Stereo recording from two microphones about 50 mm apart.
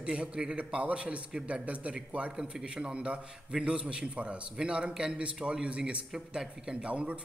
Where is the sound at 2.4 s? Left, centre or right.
Centre.